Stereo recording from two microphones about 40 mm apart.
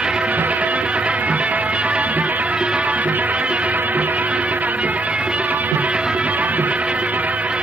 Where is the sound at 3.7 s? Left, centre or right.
Right.